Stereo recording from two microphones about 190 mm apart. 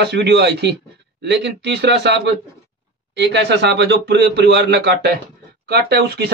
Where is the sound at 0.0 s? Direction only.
65° right (ahead or behind).